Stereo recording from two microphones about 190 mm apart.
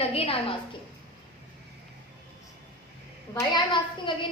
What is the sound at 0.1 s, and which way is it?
Speech, 30° left (ahead or behind).